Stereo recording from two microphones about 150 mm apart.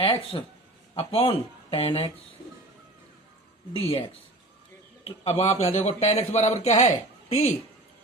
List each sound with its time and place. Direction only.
0.0 s speech: 35° left (ahead or behind)
3.7 s speech: 40° left (ahead or behind)
5.0 s a man's voice: 45° left (ahead or behind)